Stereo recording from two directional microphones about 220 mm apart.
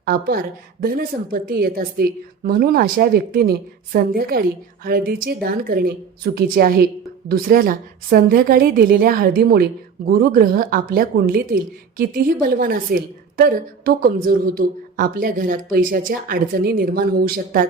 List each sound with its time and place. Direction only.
0.0 s a woman's voice: 40° right (ahead or behind)